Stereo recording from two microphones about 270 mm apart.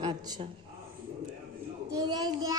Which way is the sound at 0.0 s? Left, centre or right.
Centre.